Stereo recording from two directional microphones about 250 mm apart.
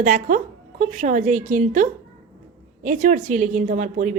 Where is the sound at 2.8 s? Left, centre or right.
Right.